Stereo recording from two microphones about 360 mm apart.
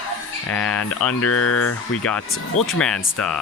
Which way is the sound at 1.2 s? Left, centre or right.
Left.